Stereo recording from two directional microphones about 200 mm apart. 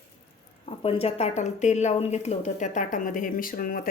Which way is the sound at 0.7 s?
30° left (ahead or behind).